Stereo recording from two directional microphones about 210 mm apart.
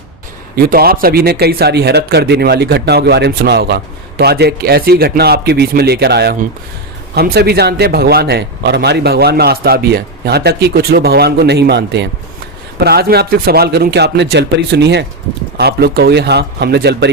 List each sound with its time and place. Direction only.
0.5 s speech: 45° right (ahead or behind)